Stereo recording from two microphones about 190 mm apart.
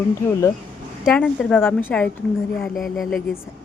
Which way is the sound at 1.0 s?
Centre (ahead or behind).